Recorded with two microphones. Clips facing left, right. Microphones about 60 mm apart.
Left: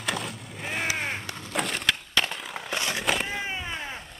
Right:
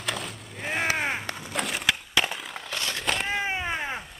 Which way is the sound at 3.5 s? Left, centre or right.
Right.